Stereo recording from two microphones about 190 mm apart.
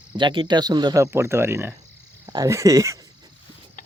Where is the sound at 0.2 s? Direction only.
25° right (ahead or behind).